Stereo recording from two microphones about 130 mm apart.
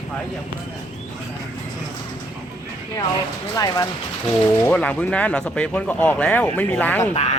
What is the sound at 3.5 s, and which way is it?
Speech, 30° left (ahead or behind).